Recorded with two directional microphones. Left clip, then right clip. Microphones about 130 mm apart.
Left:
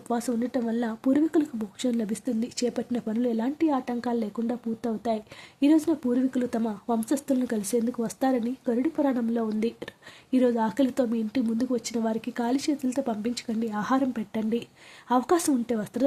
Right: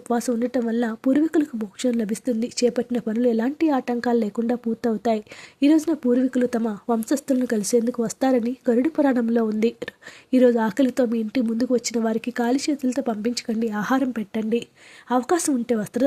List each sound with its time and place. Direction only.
0.1 s speech: 25° right (ahead or behind)